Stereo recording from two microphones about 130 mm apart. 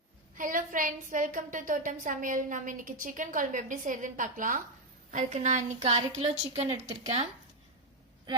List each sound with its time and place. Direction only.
0.3 s a woman's voice: 90° right
5.1 s speech: 65° right (ahead or behind)